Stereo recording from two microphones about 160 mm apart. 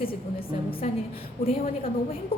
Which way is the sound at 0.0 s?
35° left (ahead or behind).